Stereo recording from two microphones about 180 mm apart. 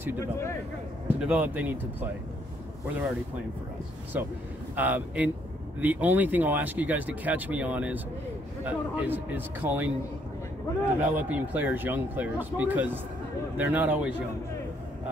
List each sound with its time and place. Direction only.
0.2 s a man's voice: 15° left (ahead or behind)
1.0 s speech: 10° right (ahead or behind)
4.7 s speech: 10° right (ahead or behind)
11.0 s speech: 10° right (ahead or behind)